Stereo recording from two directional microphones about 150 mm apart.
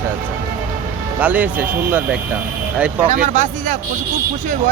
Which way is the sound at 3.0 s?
60° right (ahead or behind).